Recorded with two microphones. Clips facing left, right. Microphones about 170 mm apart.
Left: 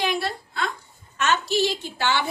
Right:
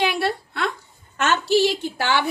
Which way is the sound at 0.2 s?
65° right (ahead or behind).